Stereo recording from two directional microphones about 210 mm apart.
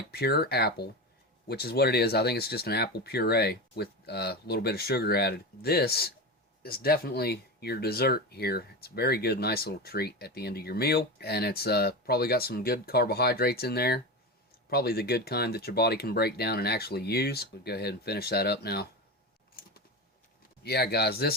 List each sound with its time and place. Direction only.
0.1 s speech: 50° left (ahead or behind)
19.6 s typing: 45° left (ahead or behind)
20.7 s speech: 50° left (ahead or behind)